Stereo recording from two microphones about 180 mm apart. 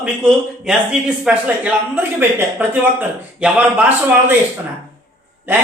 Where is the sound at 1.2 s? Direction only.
10° right (ahead or behind).